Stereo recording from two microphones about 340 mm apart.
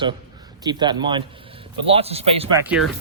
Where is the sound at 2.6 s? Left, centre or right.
Centre.